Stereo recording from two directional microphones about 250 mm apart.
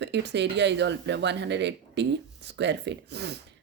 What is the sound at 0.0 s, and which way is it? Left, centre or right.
Speech, right.